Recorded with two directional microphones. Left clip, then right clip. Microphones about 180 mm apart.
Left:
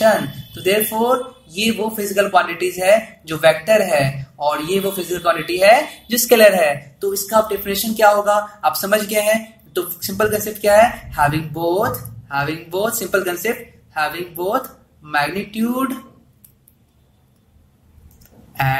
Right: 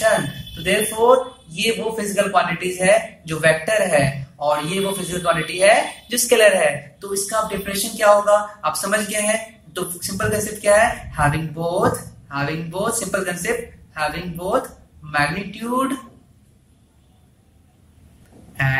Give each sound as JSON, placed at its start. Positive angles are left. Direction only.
{"t": 0.7, "sound": "speech", "side_deg": 40}